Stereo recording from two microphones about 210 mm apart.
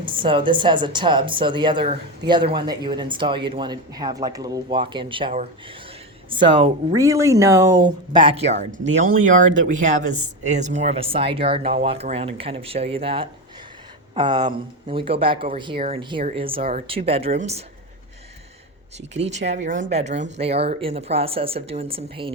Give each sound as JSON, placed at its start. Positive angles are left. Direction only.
{"t": 0.2, "sound": "speech", "side_deg": -25}
{"t": 19.1, "sound": "speech", "side_deg": -30}